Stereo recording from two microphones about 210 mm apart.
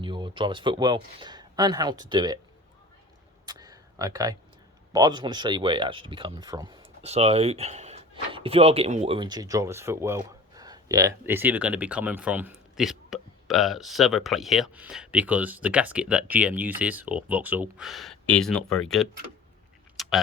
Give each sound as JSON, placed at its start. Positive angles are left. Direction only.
{"t": 0.0, "sound": "speech", "side_deg": -20}
{"t": 3.4, "sound": "a sound", "side_deg": -20}
{"t": 4.9, "sound": "speech", "side_deg": -20}
{"t": 20.0, "sound": "keys jangling", "side_deg": 0}